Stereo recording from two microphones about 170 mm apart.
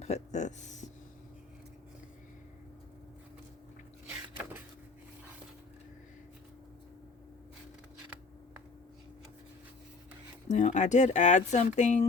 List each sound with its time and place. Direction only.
0.0 s speech: 40° left (ahead or behind)
4.1 s a sound: 10° right (ahead or behind)
10.5 s speech: 45° left (ahead or behind)